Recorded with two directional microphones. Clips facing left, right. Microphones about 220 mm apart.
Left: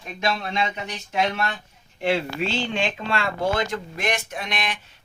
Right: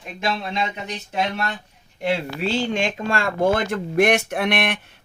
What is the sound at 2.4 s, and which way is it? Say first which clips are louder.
Speech: right 3 dB; 40° right (ahead or behind).